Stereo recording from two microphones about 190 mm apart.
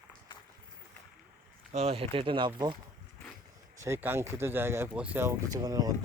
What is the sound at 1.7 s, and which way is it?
Speech, 30° right (ahead or behind).